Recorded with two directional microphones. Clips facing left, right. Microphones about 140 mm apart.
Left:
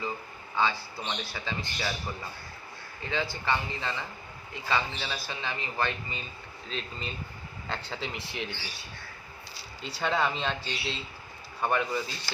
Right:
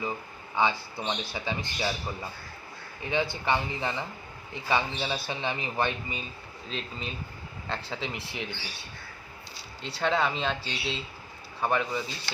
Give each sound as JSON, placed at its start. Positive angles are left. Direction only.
{"t": 0.5, "sound": "speech", "side_deg": -15}
{"t": 3.0, "sound": "a man's voice", "side_deg": -20}
{"t": 6.7, "sound": "speech", "side_deg": 0}
{"t": 9.8, "sound": "speech", "side_deg": 0}